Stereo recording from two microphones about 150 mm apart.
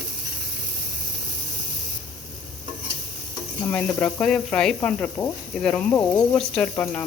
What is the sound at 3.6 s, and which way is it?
Speech, 10° left (ahead or behind).